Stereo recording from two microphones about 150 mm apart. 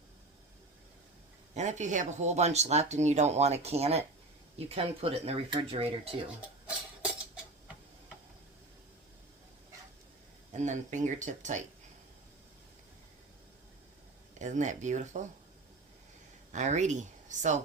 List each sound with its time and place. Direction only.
1.5 s speech: 50° right (ahead or behind)
10.5 s speech: 55° right (ahead or behind)
14.3 s speech: 55° right (ahead or behind)
16.5 s speech: 55° right (ahead or behind)